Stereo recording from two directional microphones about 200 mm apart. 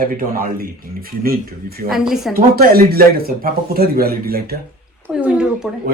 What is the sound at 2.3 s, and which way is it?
Speech, 45° right (ahead or behind).